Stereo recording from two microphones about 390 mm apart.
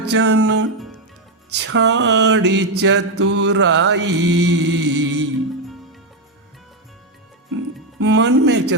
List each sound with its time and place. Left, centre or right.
0.0 s mantra: right
7.5 s music: right